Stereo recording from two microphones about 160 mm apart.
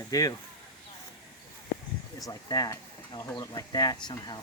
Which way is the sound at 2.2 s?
20° left (ahead or behind).